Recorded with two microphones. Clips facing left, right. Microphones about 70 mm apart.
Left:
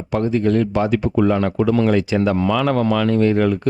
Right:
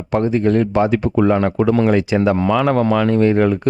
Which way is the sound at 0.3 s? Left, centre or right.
Right.